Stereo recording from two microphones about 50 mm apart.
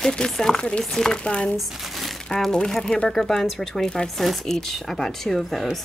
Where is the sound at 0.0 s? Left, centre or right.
Centre.